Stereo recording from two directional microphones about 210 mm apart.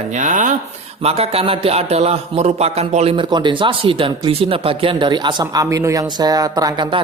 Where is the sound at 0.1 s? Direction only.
35° right (ahead or behind).